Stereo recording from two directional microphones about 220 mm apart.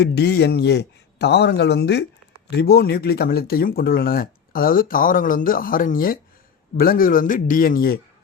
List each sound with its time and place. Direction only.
0.0 s speech: 50° left (ahead or behind)